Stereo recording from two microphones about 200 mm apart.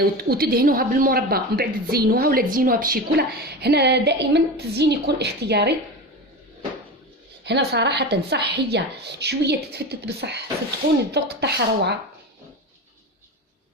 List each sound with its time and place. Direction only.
0.2 s a woman's voice: 50° right (ahead or behind)
7.4 s a woman's voice: 55° right (ahead or behind)